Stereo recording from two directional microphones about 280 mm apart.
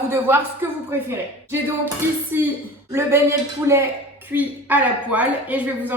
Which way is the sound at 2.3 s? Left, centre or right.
Centre.